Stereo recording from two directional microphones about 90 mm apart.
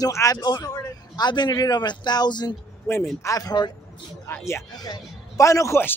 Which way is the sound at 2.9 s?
35° left (ahead or behind).